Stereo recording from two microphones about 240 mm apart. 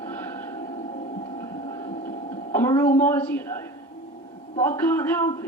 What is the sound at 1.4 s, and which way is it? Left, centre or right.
Hum, centre.